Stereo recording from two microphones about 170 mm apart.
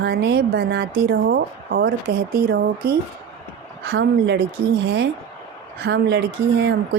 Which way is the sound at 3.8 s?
70° right (ahead or behind).